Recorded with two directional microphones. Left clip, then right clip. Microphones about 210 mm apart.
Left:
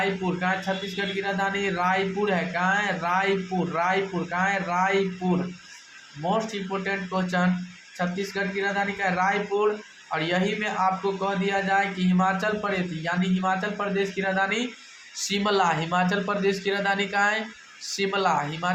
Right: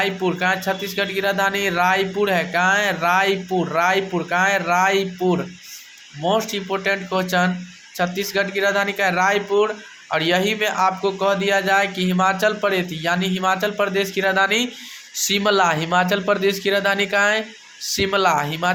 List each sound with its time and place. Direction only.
0.0 s speech: 40° right (ahead or behind)
6.3 s speech: 40° right (ahead or behind)